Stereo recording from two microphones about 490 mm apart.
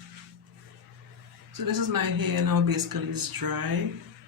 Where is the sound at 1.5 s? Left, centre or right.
Right.